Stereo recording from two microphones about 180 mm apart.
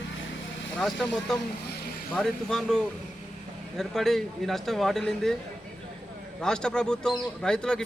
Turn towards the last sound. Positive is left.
turn(degrees=5)  # may be behind; listen again after turning